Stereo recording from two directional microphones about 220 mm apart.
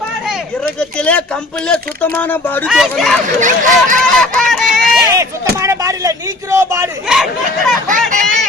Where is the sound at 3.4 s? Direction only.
35° right (ahead or behind).